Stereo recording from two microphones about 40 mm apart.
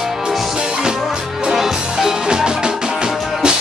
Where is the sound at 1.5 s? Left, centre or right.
Centre.